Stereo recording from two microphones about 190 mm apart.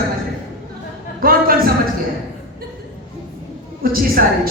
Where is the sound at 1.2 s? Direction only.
50° right (ahead or behind).